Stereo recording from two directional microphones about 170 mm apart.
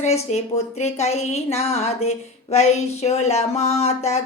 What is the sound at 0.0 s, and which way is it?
Speech, 40° left (ahead or behind).